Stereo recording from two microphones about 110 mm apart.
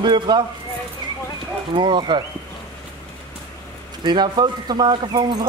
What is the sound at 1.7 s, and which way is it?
Speech, 50° right (ahead or behind).